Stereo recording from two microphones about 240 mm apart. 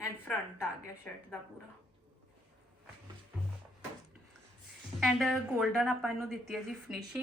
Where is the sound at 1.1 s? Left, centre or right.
Centre.